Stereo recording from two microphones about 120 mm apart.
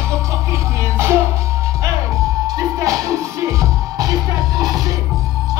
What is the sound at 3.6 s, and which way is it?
Music, 30° right (ahead or behind).